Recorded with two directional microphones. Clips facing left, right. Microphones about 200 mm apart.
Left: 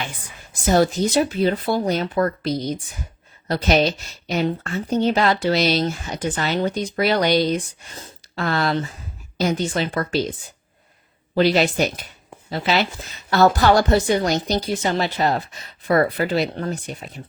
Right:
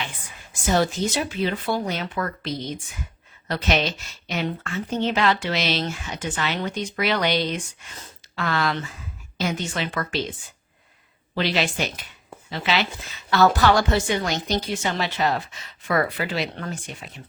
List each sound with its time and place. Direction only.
0.5 s a woman's voice: 40° left (ahead or behind)
11.3 s a woman's voice: 40° left (ahead or behind)